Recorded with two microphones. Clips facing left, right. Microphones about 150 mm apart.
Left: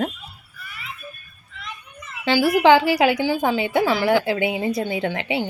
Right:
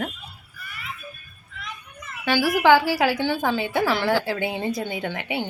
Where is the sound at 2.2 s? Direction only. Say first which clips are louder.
Left 3 dB; 25° left (ahead or behind).